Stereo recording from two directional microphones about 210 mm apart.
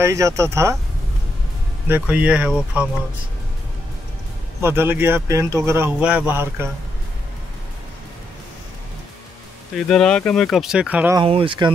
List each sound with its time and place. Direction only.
0.0 s speech: 15° right (ahead or behind)
1.9 s speech: 5° right (ahead or behind)
4.6 s speech: 10° right (ahead or behind)
9.8 s speech: centre (ahead or behind)
11.1 s speech: 25° right (ahead or behind)